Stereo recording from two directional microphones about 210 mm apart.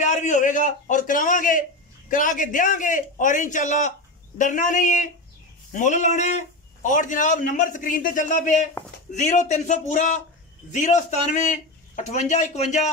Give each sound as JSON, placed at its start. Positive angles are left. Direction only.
{"t": 0.0, "sound": "a man's voice", "side_deg": 35}